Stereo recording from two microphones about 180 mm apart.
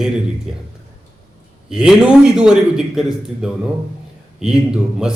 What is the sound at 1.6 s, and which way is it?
A man's voice, 5° right (ahead or behind).